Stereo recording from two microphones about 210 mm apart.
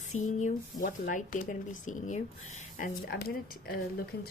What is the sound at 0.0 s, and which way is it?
Speech, 35° left (ahead or behind).